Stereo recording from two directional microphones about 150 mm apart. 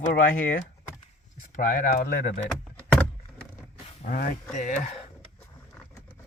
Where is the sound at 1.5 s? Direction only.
65° left (ahead or behind).